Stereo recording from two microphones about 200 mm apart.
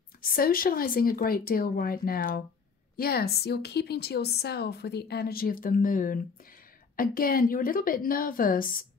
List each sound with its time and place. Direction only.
0.2 s a woman's voice: 45° left (ahead or behind)